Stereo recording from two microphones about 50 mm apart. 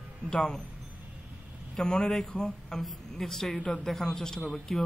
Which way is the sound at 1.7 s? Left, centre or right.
Centre.